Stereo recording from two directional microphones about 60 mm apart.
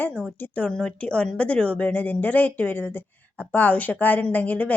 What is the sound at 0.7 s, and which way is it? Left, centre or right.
A woman's voice, centre.